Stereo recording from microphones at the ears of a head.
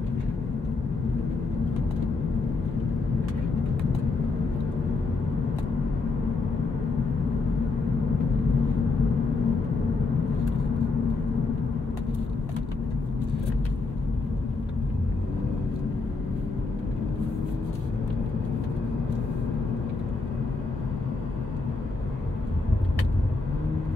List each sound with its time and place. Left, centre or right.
3.5 s vehicle: left
5.8 s vehicle: left